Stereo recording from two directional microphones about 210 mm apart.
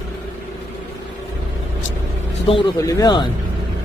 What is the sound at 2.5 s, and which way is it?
Speech, 25° left (ahead or behind).